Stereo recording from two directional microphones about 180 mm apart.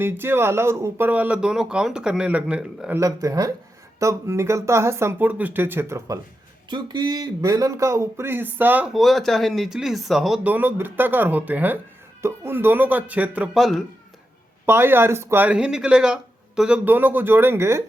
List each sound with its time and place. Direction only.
0.0 s speech: 10° right (ahead or behind)
3.0 s speech: 20° right (ahead or behind)
6.7 s speech: 25° right (ahead or behind); by 13.8 s centre (ahead or behind)
14.7 s speech: 10° right (ahead or behind)